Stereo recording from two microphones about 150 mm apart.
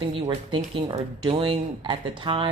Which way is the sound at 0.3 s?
35° right (ahead or behind).